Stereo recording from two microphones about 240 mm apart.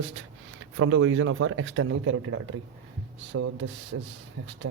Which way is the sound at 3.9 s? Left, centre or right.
Right.